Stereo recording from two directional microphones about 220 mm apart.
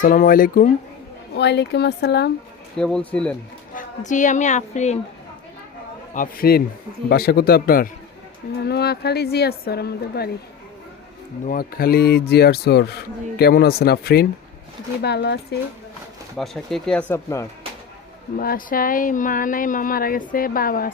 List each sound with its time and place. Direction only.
0.0 s speech: 40° left (ahead or behind)
1.4 s a woman's voice: 50° left (ahead or behind)
2.7 s speech: 5° left (ahead or behind)
3.8 s speech: 35° left (ahead or behind)
6.1 s a woman's voice: 40° left (ahead or behind)
11.4 s a woman's voice: 45° left (ahead or behind)
16.4 s speech: centre (ahead or behind)
18.3 s speech: 40° left (ahead or behind)